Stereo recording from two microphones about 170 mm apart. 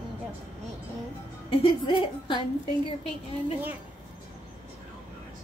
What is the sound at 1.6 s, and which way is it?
Speech, 25° left (ahead or behind).